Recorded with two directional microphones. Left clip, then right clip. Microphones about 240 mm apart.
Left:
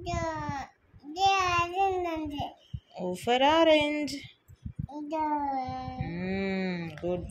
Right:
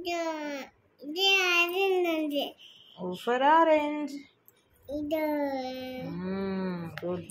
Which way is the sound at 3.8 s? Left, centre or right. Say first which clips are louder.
Left 2 dB; left.